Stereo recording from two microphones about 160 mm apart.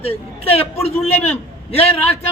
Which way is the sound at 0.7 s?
15° left (ahead or behind).